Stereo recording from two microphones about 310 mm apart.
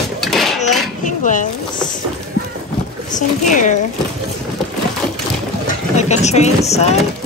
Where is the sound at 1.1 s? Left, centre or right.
Left.